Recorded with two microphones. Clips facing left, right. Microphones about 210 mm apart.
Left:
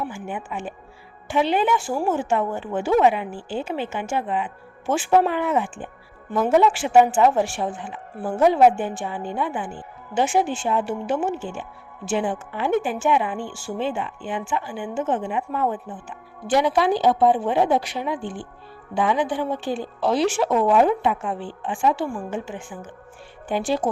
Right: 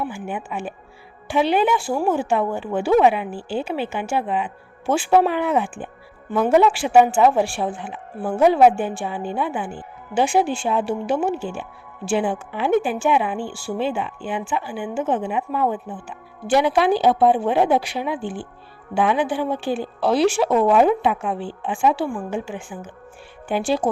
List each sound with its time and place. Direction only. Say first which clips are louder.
0.5 s a woman's voice: right 2 dB; 15° right (ahead or behind)